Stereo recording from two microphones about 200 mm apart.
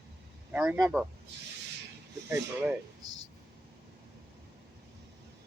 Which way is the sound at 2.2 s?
10° right (ahead or behind).